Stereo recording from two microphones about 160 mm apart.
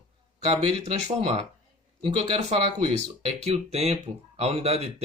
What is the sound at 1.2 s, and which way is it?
Speech, 45° right (ahead or behind).